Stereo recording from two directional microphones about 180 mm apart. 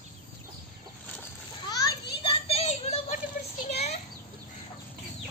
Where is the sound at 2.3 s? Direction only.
35° left (ahead or behind).